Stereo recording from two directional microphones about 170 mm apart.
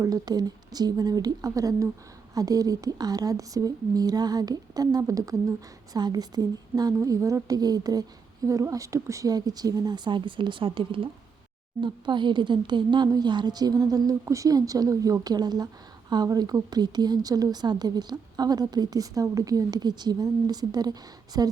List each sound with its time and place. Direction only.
0.0 s speech: 20° right (ahead or behind)